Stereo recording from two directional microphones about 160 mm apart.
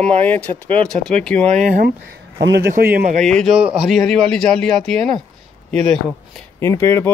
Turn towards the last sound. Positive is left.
turn(degrees=15)  # may be behind; listen again after turning